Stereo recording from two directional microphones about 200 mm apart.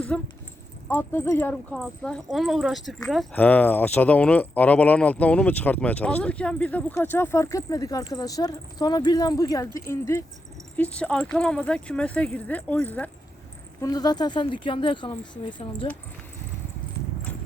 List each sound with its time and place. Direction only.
0.1 s speech: 5° left (ahead or behind)
13.8 s speech: 20° left (ahead or behind)